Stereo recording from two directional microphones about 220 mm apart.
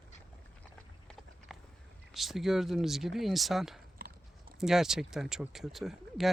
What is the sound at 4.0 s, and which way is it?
Horse, 40° right (ahead or behind).